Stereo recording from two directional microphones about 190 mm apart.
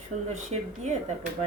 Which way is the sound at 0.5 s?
35° right (ahead or behind).